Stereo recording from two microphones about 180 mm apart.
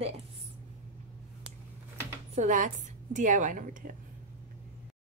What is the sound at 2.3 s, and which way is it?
A woman's voice, 45° right (ahead or behind).